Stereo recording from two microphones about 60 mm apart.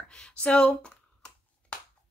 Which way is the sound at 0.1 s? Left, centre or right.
Centre.